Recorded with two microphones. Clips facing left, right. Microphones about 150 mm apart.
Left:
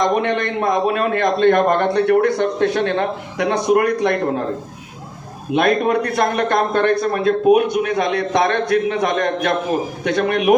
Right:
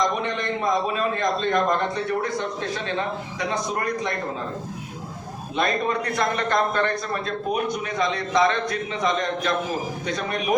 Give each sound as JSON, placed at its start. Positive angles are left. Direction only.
{"t": 0.0, "sound": "a man's voice", "side_deg": 65}
{"t": 5.5, "sound": "a man's voice", "side_deg": 65}